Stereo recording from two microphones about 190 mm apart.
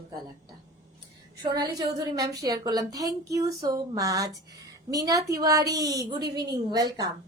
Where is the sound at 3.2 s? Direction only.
15° right (ahead or behind).